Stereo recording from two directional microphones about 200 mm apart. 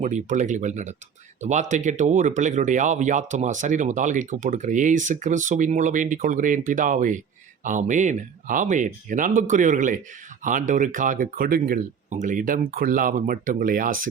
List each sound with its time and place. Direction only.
0.0 s speech: 35° right (ahead or behind)